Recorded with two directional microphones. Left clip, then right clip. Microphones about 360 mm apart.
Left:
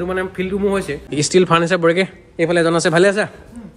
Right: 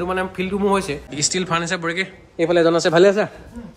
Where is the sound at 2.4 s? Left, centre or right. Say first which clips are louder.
Left 1 dB; centre.